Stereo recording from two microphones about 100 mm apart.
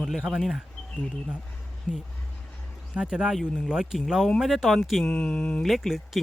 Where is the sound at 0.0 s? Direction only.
5° right (ahead or behind).